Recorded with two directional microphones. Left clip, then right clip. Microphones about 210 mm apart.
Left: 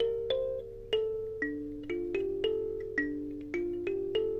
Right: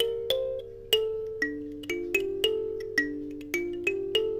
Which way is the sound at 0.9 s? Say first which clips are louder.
Right 5 dB; 30° right (ahead or behind).